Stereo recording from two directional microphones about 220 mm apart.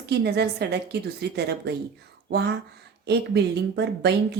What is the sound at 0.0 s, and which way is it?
Speech, 50° right (ahead or behind).